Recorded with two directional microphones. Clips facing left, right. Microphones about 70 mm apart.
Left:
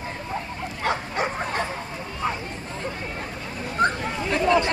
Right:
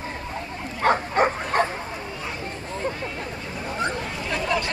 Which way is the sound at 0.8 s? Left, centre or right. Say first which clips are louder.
Right 6 dB; right.